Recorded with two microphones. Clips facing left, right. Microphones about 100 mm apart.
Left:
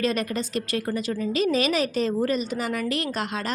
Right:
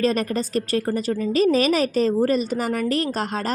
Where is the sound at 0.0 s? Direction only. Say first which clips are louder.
Right 4 dB; 40° right (ahead or behind).